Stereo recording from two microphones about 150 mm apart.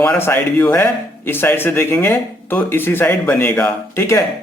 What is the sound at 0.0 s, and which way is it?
Speech, 15° left (ahead or behind).